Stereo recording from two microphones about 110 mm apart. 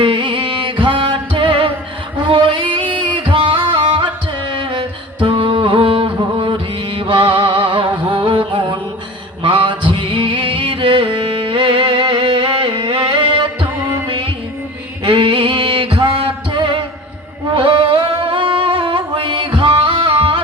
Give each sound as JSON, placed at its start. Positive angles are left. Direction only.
{"t": 0.0, "sound": "music", "side_deg": -50}
{"t": 2.2, "sound": "singing", "side_deg": -50}
{"t": 3.2, "sound": "music", "side_deg": -50}